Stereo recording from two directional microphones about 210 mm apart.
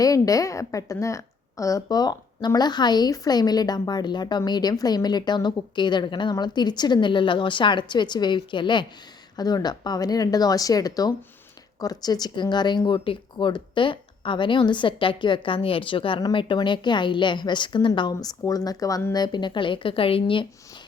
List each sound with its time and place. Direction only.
0.0 s a woman's voice: 15° left (ahead or behind)